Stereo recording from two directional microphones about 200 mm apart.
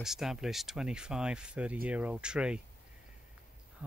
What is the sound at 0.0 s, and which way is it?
Speech, centre (ahead or behind).